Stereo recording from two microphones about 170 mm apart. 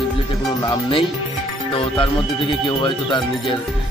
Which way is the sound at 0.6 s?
30° left (ahead or behind).